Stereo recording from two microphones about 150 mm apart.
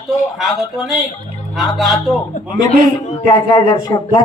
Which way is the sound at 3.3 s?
25° left (ahead or behind).